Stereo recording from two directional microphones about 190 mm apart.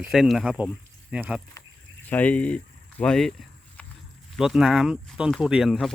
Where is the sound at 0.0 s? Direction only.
Centre (ahead or behind).